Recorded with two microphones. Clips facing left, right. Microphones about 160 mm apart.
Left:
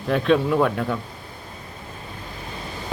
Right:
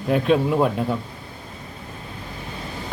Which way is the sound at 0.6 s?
25° right (ahead or behind).